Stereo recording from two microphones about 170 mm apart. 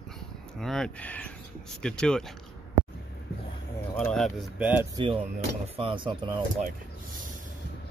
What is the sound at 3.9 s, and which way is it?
Speech, centre (ahead or behind).